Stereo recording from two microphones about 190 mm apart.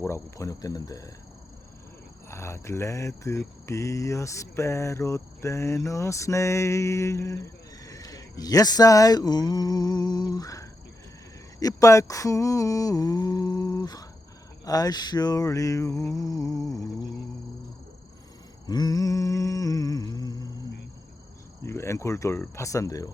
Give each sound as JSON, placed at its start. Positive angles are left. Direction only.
{"t": 0.0, "sound": "speech", "side_deg": 15}
{"t": 2.3, "sound": "speech", "side_deg": 15}
{"t": 11.6, "sound": "a sound", "side_deg": 15}
{"t": 14.6, "sound": "speech", "side_deg": 20}
{"t": 18.6, "sound": "humming", "side_deg": 20}
{"t": 21.6, "sound": "speech", "side_deg": 15}